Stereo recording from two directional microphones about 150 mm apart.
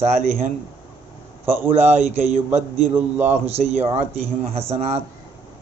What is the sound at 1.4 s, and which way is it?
Speech, 15° right (ahead or behind).